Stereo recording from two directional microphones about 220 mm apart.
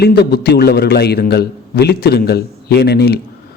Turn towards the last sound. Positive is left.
turn(degrees=45)  # may be behind; listen again after turning